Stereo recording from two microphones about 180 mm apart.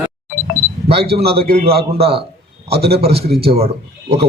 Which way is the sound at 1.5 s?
35° right (ahead or behind).